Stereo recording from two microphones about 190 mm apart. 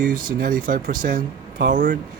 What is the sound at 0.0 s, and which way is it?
Speech, 45° right (ahead or behind).